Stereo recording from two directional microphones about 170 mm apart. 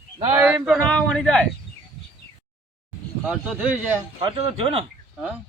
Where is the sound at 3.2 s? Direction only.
10° right (ahead or behind).